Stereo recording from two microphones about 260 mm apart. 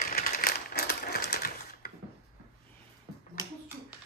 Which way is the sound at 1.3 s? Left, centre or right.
Left.